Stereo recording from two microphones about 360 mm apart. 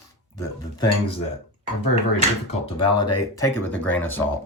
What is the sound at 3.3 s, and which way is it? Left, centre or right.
Speech, centre.